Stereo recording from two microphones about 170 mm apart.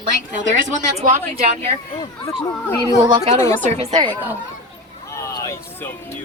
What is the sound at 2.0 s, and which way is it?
Speech, 20° left (ahead or behind).